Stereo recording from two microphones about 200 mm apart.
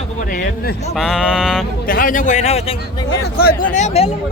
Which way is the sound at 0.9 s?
Centre (ahead or behind).